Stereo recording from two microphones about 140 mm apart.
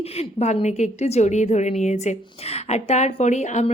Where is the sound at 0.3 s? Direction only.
55° left (ahead or behind).